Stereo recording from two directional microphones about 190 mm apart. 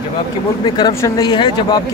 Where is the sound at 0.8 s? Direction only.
20° left (ahead or behind).